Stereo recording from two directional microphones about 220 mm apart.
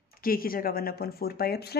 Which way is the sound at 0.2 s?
40° left (ahead or behind).